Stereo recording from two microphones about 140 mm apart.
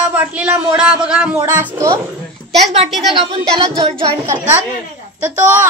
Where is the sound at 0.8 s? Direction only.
5° right (ahead or behind).